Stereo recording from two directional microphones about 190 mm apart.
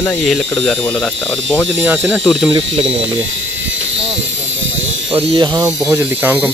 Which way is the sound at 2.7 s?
30° right (ahead or behind).